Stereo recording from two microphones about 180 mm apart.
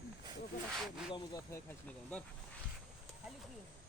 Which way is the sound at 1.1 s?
15° left (ahead or behind).